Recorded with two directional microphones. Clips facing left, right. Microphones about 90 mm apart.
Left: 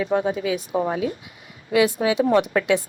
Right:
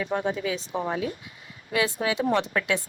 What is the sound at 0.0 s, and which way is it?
A woman's voice, 35° left (ahead or behind).